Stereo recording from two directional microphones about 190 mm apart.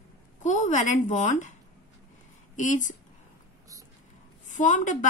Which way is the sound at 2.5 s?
40° left (ahead or behind).